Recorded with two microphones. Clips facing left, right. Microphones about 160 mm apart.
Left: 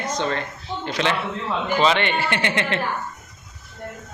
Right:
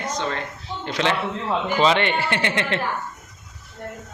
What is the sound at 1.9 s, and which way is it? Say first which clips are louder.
Speech: right 1 dB; 35° right (ahead or behind).